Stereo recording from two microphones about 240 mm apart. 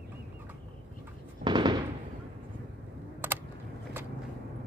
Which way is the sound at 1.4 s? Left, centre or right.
Centre.